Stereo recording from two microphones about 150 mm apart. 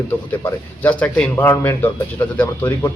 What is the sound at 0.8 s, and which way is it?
Speech, 10° left (ahead or behind).